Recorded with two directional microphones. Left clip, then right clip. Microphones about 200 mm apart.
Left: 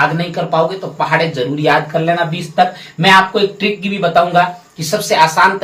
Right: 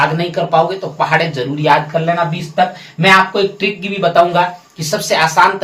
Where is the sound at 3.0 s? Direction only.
20° right (ahead or behind).